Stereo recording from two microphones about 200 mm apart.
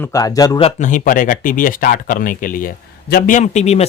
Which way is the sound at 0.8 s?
40° left (ahead or behind).